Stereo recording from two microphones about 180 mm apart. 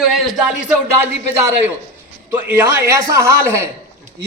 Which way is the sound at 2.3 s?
10° right (ahead or behind).